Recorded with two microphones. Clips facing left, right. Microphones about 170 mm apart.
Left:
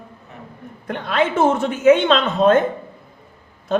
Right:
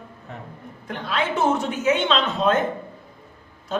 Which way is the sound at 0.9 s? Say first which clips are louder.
Left 5 dB; 60° left (ahead or behind).